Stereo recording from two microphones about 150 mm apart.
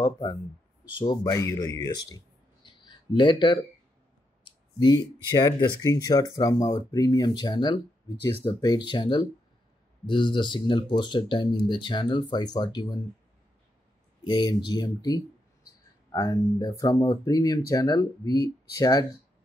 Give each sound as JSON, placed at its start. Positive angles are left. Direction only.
{"t": 0.0, "sound": "speech", "side_deg": 25}
{"t": 14.2, "sound": "speech", "side_deg": 30}